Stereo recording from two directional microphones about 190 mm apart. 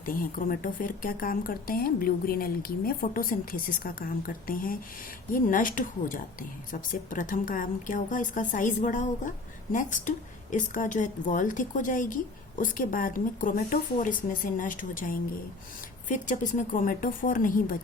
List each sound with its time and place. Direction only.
0.0 s a woman's voice: 45° left (ahead or behind)